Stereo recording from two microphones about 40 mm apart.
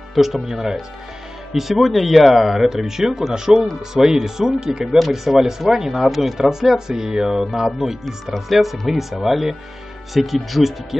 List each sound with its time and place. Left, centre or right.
0.1 s speech: centre